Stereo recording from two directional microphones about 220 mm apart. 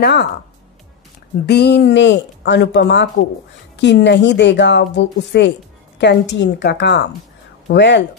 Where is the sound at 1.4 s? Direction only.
50° left (ahead or behind).